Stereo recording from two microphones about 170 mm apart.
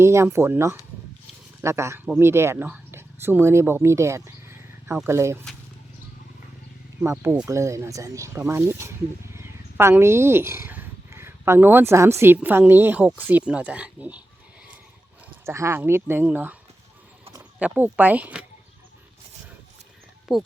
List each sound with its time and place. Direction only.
0.0 s speech: 15° right (ahead or behind)
7.0 s speech: 15° right (ahead or behind)
15.4 s speech: 15° right (ahead or behind)
17.6 s speech: 10° right (ahead or behind)
20.3 s speech: centre (ahead or behind)